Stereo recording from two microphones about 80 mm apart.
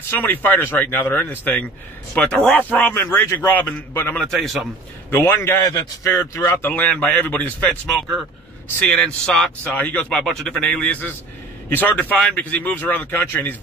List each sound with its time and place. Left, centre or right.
0.1 s speech: left
2.1 s a man's voice: centre
4.2 s a man's voice: centre
5.1 s a man's voice: left
6.6 s a man's voice: centre
9.7 s speech: left
10.0 s a man's voice: centre; by 13.6 s left